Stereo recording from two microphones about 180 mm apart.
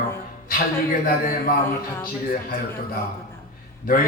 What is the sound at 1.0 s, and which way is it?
A man's voice, 50° left (ahead or behind).